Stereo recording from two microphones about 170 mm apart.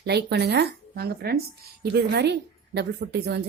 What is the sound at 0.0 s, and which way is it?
A woman's voice, 75° right (ahead or behind).